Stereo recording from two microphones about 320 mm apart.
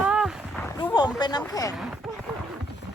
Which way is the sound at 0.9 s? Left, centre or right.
Centre.